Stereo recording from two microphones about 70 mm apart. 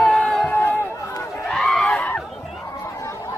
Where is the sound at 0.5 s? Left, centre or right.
Left.